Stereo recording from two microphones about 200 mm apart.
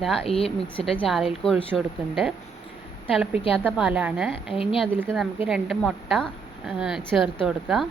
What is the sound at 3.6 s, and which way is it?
A woman's voice, 5° right (ahead or behind).